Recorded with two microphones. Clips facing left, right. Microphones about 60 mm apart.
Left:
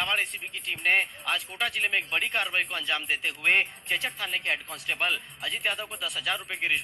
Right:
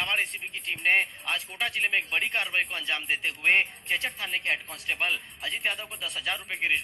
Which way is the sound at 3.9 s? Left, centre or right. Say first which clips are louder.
Left 1 dB; right.